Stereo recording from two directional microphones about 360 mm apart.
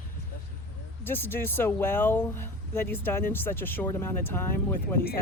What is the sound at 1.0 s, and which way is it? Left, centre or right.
Speech, centre.